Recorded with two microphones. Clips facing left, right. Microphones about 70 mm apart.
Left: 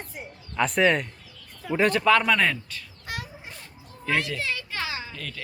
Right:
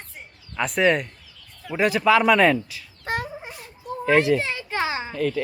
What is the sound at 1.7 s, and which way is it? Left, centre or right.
Speech, centre.